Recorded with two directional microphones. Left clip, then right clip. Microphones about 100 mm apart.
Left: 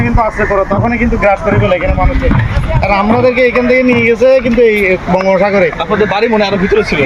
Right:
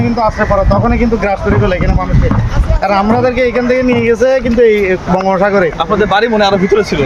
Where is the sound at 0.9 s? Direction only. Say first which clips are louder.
Left 2 dB; 50° right (ahead or behind).